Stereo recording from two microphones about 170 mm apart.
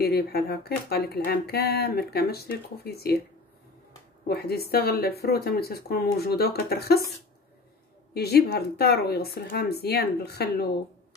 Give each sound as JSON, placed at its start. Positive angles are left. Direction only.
{"t": 0.0, "sound": "speech", "side_deg": 65}
{"t": 4.3, "sound": "speech", "side_deg": 65}
{"t": 8.1, "sound": "speech", "side_deg": 70}